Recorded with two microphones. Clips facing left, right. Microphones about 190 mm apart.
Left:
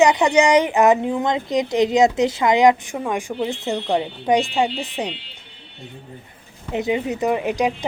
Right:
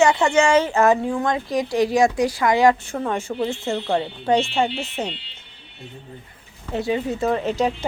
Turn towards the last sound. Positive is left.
turn(degrees=15)  # may be behind; listen again after turning